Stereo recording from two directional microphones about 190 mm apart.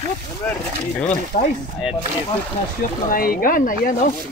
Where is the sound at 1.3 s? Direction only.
40° left (ahead or behind).